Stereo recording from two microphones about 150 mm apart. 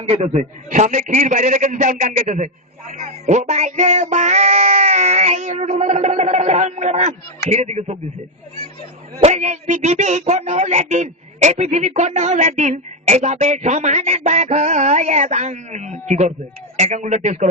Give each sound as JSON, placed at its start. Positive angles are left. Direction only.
{"t": 0.0, "sound": "a man's voice", "side_deg": -45}
{"t": 9.2, "sound": "a man's voice", "side_deg": -50}